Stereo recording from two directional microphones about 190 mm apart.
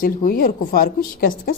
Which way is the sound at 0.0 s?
50° left (ahead or behind).